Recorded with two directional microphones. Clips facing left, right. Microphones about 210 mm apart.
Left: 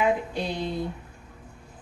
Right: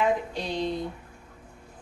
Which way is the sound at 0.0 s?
10° left (ahead or behind).